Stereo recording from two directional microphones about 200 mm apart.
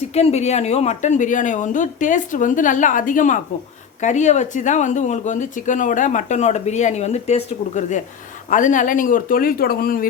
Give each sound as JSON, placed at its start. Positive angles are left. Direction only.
{"t": 0.1, "sound": "speech", "side_deg": 30}